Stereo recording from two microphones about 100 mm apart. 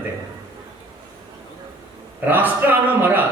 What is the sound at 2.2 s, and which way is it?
A man's voice, 20° right (ahead or behind).